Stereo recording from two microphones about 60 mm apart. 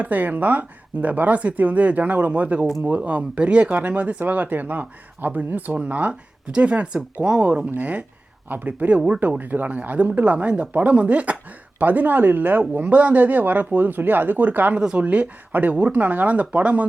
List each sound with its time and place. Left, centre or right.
0.0 s speech: right
14.8 s a woman's voice: centre
15.0 s speech: right